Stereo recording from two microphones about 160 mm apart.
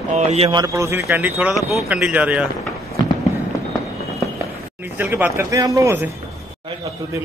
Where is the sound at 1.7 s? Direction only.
Centre (ahead or behind).